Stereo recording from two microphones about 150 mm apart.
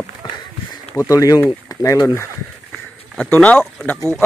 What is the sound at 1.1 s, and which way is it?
Speech, 25° left (ahead or behind).